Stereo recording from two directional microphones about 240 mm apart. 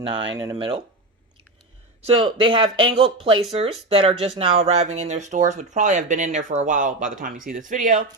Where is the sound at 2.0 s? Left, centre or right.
Right.